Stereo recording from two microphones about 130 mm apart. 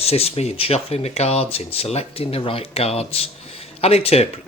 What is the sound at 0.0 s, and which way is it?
Speech, 50° left (ahead or behind).